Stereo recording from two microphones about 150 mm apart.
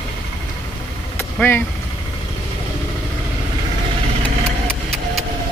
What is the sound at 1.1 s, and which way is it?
Vehicle, 15° left (ahead or behind).